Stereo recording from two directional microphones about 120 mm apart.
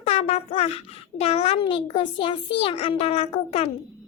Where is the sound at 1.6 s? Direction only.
45° left (ahead or behind).